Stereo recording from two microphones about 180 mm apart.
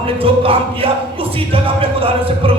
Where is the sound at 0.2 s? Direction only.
30° right (ahead or behind).